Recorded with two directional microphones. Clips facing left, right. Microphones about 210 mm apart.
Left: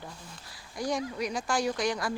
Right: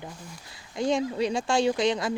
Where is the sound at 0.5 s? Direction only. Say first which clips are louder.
Right 6 dB; 25° right (ahead or behind).